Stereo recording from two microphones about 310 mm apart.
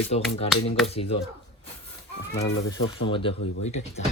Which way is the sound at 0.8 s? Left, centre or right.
Centre.